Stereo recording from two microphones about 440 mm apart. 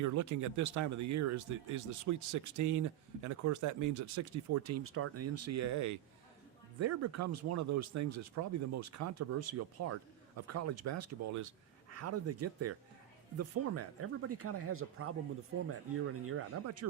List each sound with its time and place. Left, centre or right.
0.0 s speech: right
16.2 s speech: right